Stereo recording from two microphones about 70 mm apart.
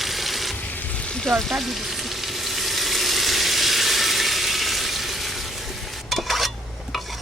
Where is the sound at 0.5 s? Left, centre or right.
Left.